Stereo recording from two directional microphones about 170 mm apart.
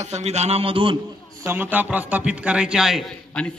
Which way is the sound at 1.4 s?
10° right (ahead or behind).